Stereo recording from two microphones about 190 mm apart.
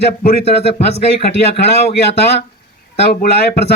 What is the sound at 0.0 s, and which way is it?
Speech, 60° left (ahead or behind).